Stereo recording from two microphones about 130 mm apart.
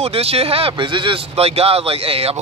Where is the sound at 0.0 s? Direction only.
50° right (ahead or behind).